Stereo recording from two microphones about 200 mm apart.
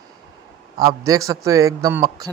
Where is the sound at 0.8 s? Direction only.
15° right (ahead or behind).